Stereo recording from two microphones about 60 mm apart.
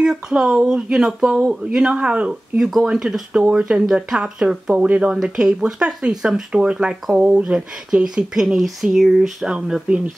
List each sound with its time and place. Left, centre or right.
0.0 s speech: centre
4.8 s speech: right
5.1 s speech: centre